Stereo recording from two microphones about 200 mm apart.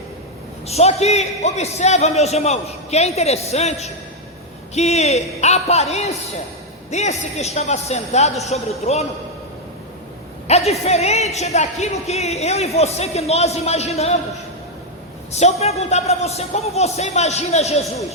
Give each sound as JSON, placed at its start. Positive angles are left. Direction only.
{"t": 0.7, "sound": "a woman's voice", "side_deg": 30}
{"t": 10.4, "sound": "a woman's voice", "side_deg": 30}
{"t": 15.3, "sound": "a woman's voice", "side_deg": 35}